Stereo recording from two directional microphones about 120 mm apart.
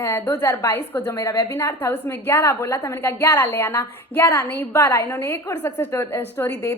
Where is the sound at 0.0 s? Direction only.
20° left (ahead or behind).